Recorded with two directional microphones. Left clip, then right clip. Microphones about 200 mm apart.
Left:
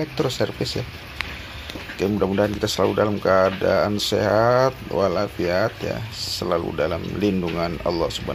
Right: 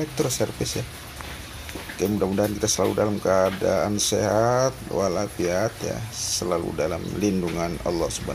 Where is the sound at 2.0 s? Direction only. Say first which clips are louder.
Left 3 dB; 10° left (ahead or behind).